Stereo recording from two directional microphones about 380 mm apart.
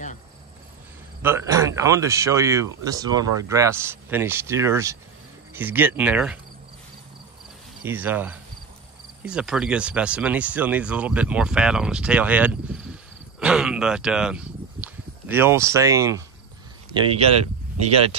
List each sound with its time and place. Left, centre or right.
1.2 s speech: centre
7.8 s speech: centre